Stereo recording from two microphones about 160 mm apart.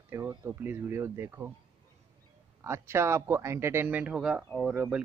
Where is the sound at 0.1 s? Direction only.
20° right (ahead or behind).